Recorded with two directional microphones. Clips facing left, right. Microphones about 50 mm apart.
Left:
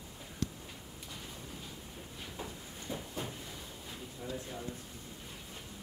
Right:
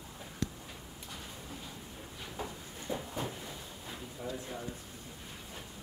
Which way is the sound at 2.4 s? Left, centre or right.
Centre.